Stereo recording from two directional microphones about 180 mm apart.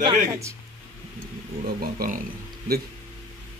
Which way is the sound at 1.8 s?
50° right (ahead or behind).